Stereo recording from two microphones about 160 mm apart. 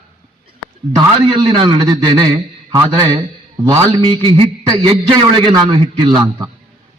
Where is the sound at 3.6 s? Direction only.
25° right (ahead or behind).